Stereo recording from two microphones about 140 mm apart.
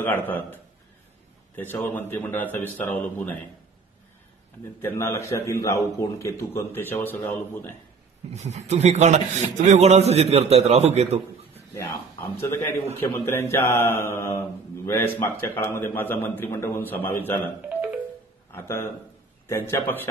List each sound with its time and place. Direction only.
0.0 s a man's voice: 15° left (ahead or behind)
1.6 s a man's voice: 15° left (ahead or behind)
4.8 s a man's voice: 20° left (ahead or behind)
8.3 s a man's voice: 55° right (ahead or behind)
11.7 s a man's voice: 20° left (ahead or behind)
17.6 s music: 10° right (ahead or behind)
18.5 s a man's voice: 15° left (ahead or behind)